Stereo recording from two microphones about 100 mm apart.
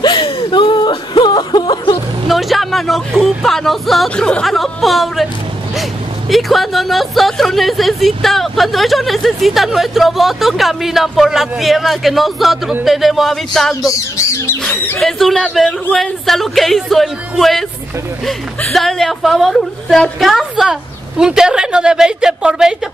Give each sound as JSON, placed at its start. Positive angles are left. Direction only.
{"t": 0.0, "sound": "whimper", "side_deg": 55}
{"t": 2.2, "sound": "music", "side_deg": 0}
{"t": 4.3, "sound": "speech", "side_deg": 5}
{"t": 13.8, "sound": "bird", "side_deg": 30}
{"t": 15.0, "sound": "speech", "side_deg": 0}
{"t": 18.7, "sound": "a woman's voice", "side_deg": 0}